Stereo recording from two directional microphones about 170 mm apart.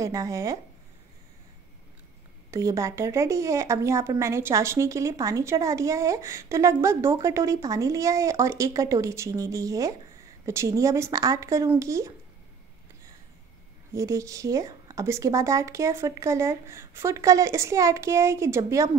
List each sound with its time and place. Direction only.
0.0 s speech: 20° right (ahead or behind)
2.5 s a woman's voice: 20° right (ahead or behind)
13.9 s a woman's voice: 20° right (ahead or behind)